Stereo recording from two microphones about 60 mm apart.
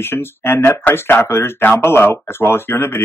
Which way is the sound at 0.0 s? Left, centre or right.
Left.